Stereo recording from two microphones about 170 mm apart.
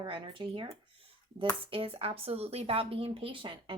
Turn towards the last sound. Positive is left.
turn(degrees=-30)  # may be behind; listen again after turning